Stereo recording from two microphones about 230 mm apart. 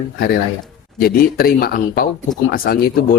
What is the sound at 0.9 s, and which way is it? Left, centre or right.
Speech, left.